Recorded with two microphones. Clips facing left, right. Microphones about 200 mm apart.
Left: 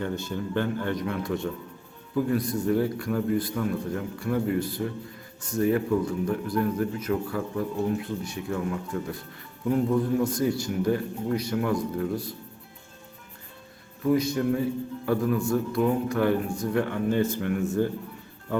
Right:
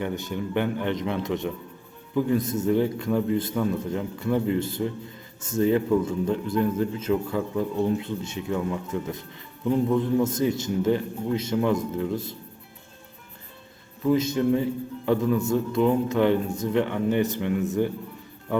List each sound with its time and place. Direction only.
0.0 s speech: 15° right (ahead or behind)
14.1 s speech: 25° right (ahead or behind)